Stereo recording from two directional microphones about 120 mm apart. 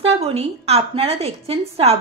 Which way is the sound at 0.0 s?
55° right (ahead or behind).